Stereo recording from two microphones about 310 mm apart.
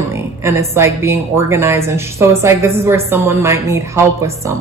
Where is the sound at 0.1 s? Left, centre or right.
Centre.